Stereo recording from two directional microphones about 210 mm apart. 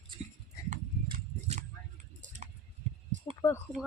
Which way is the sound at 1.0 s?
30° right (ahead or behind).